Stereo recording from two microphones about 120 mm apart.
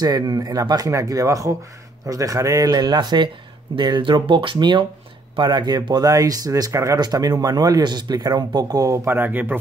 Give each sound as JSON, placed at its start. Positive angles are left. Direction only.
{"t": 0.0, "sound": "speech", "side_deg": -35}